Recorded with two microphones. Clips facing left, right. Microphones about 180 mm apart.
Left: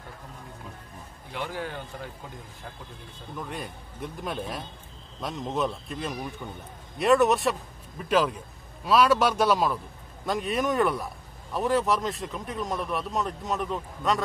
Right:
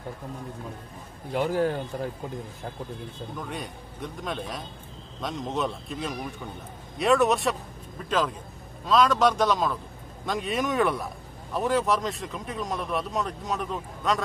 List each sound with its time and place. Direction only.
1.3 s a man's voice: 45° right (ahead or behind)
3.3 s a man's voice: centre (ahead or behind)
8.8 s a man's voice: 10° left (ahead or behind)